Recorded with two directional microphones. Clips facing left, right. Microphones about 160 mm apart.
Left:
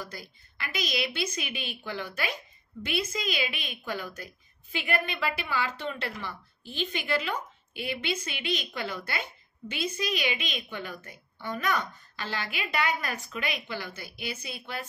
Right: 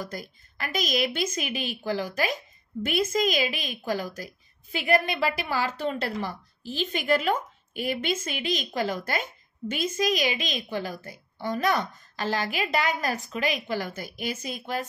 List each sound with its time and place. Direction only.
0.0 s a woman's voice: 45° right (ahead or behind)